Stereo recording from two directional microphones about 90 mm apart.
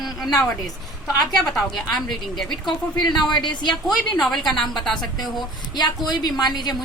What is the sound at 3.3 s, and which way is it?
Speech, 55° left (ahead or behind).